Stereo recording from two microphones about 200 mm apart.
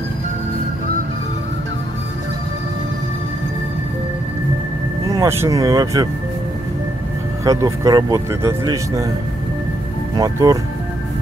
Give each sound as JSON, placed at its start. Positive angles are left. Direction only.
{"t": 5.0, "sound": "speech", "side_deg": -15}
{"t": 7.4, "sound": "speech", "side_deg": -15}
{"t": 10.1, "sound": "speech", "side_deg": -15}